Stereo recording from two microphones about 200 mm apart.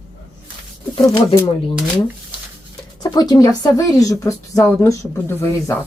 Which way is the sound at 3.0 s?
20° left (ahead or behind).